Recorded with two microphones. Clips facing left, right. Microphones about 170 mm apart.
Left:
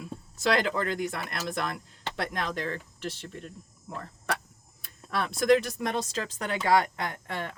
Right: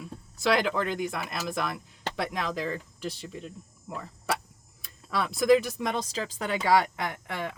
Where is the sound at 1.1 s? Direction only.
Centre (ahead or behind).